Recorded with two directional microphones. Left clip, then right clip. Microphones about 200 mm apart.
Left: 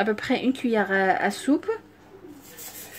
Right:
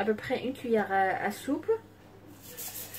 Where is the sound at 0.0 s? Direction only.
55° left (ahead or behind).